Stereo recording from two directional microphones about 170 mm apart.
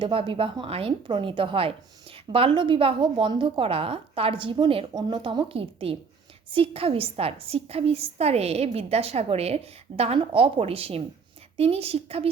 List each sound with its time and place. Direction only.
0.0 s a woman's voice: 30° right (ahead or behind)